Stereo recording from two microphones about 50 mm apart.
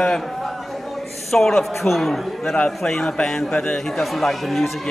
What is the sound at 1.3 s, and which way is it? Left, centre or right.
A man's voice, centre.